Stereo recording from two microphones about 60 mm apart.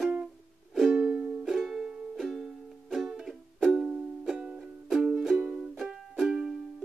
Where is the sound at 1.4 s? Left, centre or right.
Centre.